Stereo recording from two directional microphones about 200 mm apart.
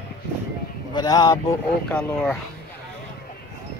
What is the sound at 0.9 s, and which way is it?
Speech, 20° left (ahead or behind).